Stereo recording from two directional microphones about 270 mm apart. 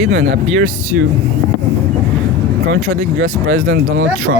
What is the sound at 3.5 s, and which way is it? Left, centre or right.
Speech, right.